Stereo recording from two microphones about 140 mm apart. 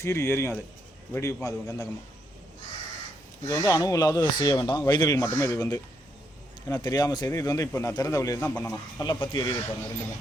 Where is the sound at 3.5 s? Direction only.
25° left (ahead or behind).